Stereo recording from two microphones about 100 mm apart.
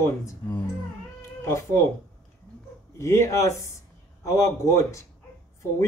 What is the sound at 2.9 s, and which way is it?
A man's voice, 30° left (ahead or behind).